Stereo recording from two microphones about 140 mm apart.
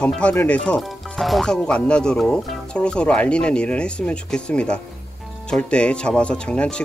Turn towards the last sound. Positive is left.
turn(degrees=5)  # may be behind; listen again after turning